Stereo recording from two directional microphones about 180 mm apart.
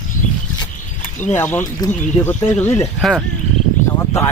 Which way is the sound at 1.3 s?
10° left (ahead or behind).